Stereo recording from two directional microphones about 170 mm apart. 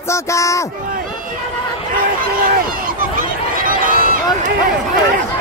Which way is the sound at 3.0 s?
55° right (ahead or behind).